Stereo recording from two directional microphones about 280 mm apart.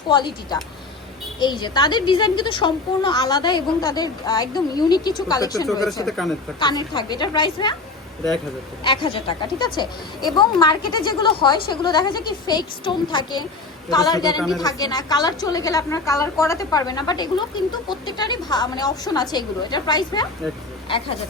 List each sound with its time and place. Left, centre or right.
0.1 s a woman's voice: centre
6.1 s speech: centre
6.6 s a woman's voice: centre
8.8 s a woman's voice: centre